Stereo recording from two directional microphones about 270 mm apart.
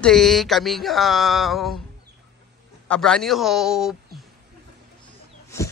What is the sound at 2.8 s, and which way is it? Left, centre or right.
Speech, centre.